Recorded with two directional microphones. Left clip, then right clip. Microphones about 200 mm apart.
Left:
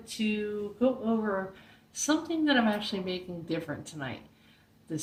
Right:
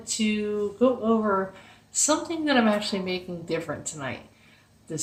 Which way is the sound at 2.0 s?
20° right (ahead or behind).